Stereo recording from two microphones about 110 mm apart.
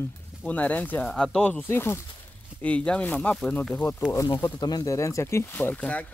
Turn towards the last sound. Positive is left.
turn(degrees=15)  # may be behind; listen again after turning